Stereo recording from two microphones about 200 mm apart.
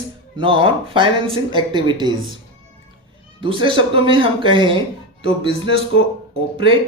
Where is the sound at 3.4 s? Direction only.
25° right (ahead or behind).